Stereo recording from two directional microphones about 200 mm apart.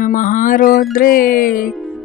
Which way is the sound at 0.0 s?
40° left (ahead or behind).